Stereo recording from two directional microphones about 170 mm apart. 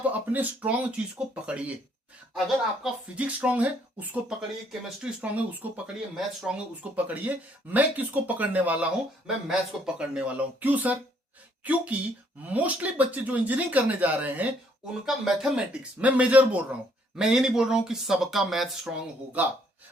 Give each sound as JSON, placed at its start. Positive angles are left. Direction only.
{"t": 0.0, "sound": "speech", "side_deg": -10}
{"t": 2.8, "sound": "speech", "side_deg": -5}